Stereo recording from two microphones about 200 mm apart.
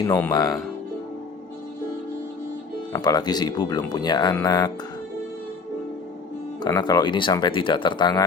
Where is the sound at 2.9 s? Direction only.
20° left (ahead or behind).